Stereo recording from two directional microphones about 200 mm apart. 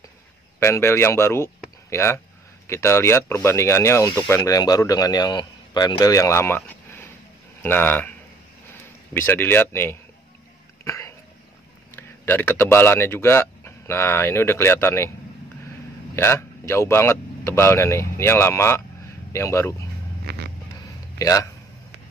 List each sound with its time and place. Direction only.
0.6 s a man's voice: 10° left (ahead or behind)
9.1 s a man's voice: 10° left (ahead or behind)
10.8 s throat clearing: 15° left (ahead or behind)
11.9 s speech: 10° left (ahead or behind)
16.2 s a man's voice: 15° left (ahead or behind)
20.2 s a sound: 55° right (ahead or behind)
21.2 s a man's voice: 15° left (ahead or behind)